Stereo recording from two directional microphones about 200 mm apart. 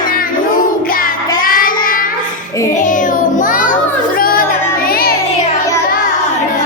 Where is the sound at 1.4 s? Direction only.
45° left (ahead or behind).